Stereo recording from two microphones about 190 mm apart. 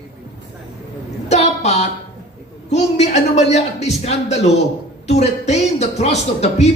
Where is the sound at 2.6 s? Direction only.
35° left (ahead or behind).